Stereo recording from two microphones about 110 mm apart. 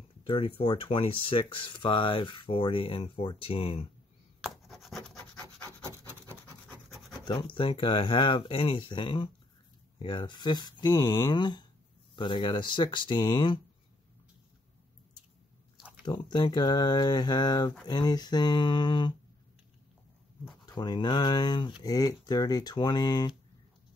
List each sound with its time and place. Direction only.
0.3 s speech: 55° left (ahead or behind)
4.4 s rub: centre (ahead or behind)
7.2 s speech: 50° left (ahead or behind)
16.1 s speech: 40° left (ahead or behind)
20.6 s speech: 40° left (ahead or behind)